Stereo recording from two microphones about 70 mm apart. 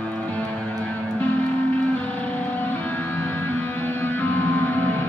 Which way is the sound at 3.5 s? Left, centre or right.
Left.